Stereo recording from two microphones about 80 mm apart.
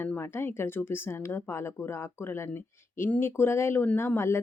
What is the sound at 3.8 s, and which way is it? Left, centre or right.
Speech, left.